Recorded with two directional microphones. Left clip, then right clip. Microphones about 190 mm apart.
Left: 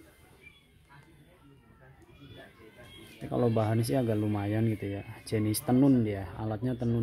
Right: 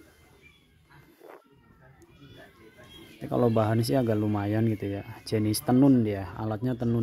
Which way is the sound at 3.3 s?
20° right (ahead or behind).